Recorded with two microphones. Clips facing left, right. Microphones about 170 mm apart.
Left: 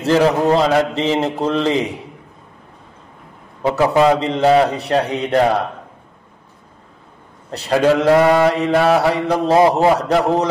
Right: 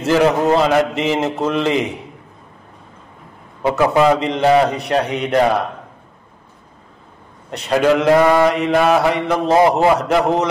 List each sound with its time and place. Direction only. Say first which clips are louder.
0.0 s mantra: even; 35° left (ahead or behind)
3.7 s mantra: even; 35° left (ahead or behind)
7.5 s mantra: even; 35° left (ahead or behind)